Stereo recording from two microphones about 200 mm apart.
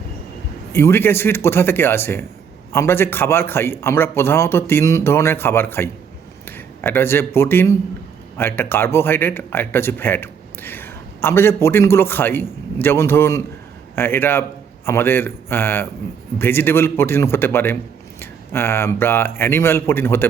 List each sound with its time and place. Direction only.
0.7 s speech: 10° left (ahead or behind)